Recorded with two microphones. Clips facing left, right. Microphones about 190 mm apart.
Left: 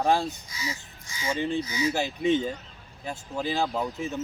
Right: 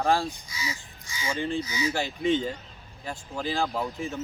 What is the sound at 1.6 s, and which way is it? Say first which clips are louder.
Speech: left 2 dB; 50° left (ahead or behind).